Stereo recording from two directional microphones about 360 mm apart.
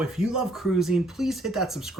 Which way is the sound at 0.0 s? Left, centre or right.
Centre.